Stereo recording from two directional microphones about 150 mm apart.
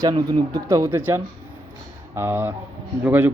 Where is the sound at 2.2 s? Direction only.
15° right (ahead or behind).